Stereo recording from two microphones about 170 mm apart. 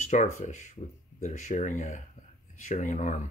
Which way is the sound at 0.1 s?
45° left (ahead or behind).